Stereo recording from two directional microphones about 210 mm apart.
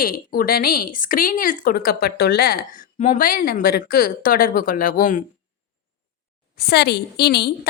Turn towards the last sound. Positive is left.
turn(degrees=50)  # may be behind; listen again after turning